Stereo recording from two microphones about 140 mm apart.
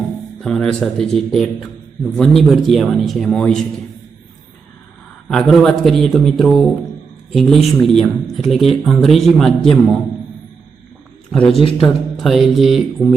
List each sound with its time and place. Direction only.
0.3 s speech: 5° left (ahead or behind)
5.3 s speech: centre (ahead or behind)
11.4 s a man's voice: 40° left (ahead or behind)
11.8 s speech: centre (ahead or behind)